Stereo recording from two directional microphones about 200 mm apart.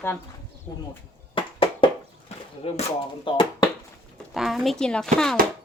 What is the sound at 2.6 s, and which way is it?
Speech, 30° left (ahead or behind).